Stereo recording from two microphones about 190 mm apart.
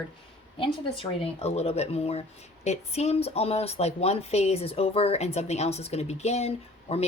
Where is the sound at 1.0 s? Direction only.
30° left (ahead or behind).